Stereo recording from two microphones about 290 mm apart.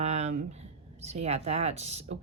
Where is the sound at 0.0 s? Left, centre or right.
Right.